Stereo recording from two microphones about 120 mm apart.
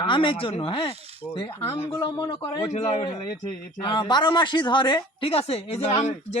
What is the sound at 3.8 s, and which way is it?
Speech, 40° left (ahead or behind).